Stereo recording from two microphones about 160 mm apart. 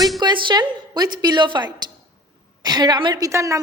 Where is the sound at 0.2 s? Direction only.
30° right (ahead or behind).